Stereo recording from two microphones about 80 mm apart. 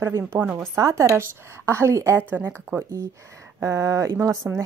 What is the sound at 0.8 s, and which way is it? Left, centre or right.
A woman's voice, right.